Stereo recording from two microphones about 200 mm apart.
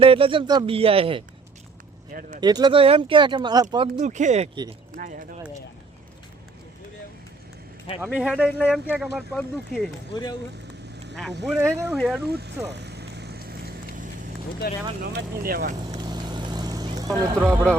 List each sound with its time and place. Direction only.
0.0 s speech: 25° right (ahead or behind)
2.4 s speech: 20° right (ahead or behind)
3.9 s speech: 35° right (ahead or behind)
7.9 s speech: 5° right (ahead or behind)
11.4 s speech: centre (ahead or behind)
12.3 s speech: 55° right (ahead or behind)
12.6 s vehicle: 55° right (ahead or behind)
14.6 s speech: 55° left (ahead or behind)
15.0 s speech: 50° right (ahead or behind)
15.9 s vehicle: 20° right (ahead or behind)
17.1 s speech: 10° right (ahead or behind)